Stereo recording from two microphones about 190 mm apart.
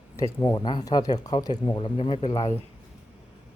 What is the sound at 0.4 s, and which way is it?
Speech, 20° left (ahead or behind).